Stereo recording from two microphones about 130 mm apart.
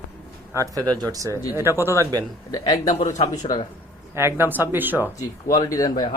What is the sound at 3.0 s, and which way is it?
Speech, 70° left (ahead or behind).